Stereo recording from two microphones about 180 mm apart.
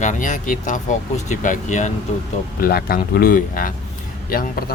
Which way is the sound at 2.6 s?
55° left (ahead or behind).